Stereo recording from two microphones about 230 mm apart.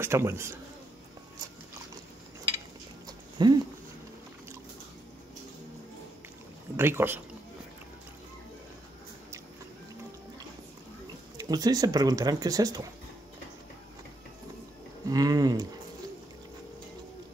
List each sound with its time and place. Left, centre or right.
0.0 s speech: centre
3.1 s a sound: centre
6.8 s speech: centre
11.3 s speech: centre
15.0 s speech: centre